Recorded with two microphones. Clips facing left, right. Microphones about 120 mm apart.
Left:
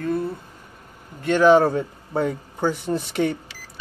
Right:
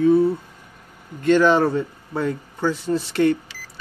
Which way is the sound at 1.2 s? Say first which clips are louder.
Left 1 dB; 10° left (ahead or behind).